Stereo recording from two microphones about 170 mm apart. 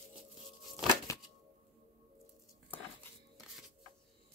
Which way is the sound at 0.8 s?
Centre (ahead or behind).